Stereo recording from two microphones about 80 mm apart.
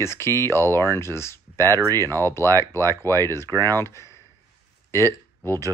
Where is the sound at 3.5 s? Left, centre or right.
Right.